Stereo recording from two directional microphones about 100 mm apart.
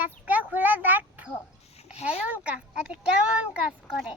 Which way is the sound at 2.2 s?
15° right (ahead or behind).